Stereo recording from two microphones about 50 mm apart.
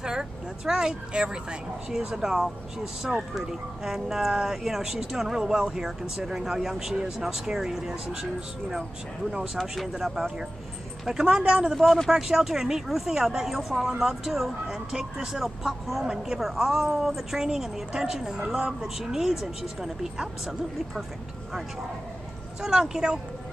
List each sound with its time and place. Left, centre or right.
0.0 s a woman's voice: centre
9.9 s a woman's voice: centre
11.4 s speech: right
11.7 s a woman's voice: centre
22.6 s a woman's voice: centre